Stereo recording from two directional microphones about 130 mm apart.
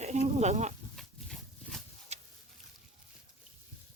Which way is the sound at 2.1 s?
55° right (ahead or behind).